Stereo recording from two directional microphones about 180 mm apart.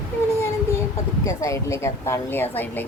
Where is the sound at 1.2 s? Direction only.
15° left (ahead or behind).